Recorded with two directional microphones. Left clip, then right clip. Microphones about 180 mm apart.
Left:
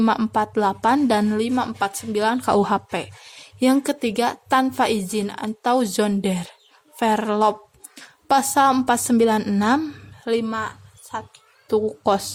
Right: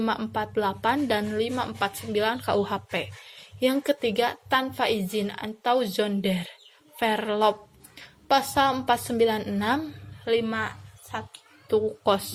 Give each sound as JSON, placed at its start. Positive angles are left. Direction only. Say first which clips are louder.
{"t": 0.0, "sound": "a woman's voice", "louder": "left 7 dB", "side_deg": 45}